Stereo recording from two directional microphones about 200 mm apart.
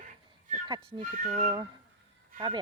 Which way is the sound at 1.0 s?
40° right (ahead or behind).